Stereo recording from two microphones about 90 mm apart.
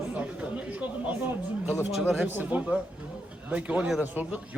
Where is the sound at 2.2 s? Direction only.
20° right (ahead or behind).